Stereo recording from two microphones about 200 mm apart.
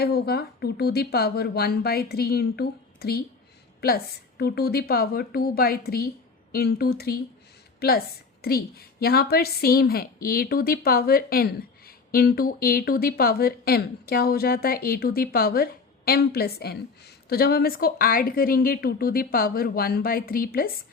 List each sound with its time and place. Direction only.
0.0 s a woman's voice: 50° left (ahead or behind)